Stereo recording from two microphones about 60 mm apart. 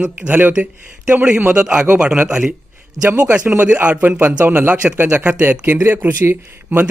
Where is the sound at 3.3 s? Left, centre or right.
Right.